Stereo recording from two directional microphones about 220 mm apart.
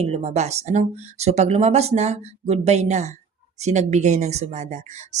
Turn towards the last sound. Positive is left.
turn(degrees=-30)  # may be behind; listen again after turning